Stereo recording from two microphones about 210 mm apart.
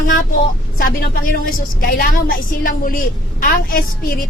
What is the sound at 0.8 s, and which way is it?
A woman's voice, 45° left (ahead or behind).